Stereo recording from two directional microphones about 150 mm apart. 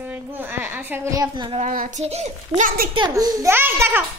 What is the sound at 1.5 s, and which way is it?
Speech, 60° right (ahead or behind).